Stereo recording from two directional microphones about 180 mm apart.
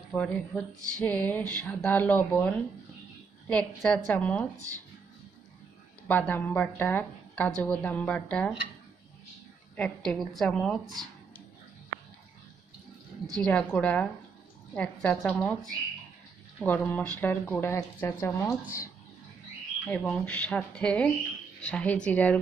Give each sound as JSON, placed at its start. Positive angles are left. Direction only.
{"t": 0.1, "sound": "a woman's voice", "side_deg": 5}
{"t": 6.0, "sound": "a woman's voice", "side_deg": 10}
{"t": 9.8, "sound": "a woman's voice", "side_deg": 5}
{"t": 13.4, "sound": "a woman's voice", "side_deg": 10}
{"t": 19.9, "sound": "a woman's voice", "side_deg": 10}